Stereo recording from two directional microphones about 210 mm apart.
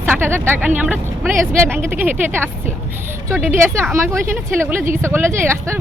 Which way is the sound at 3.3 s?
10° right (ahead or behind).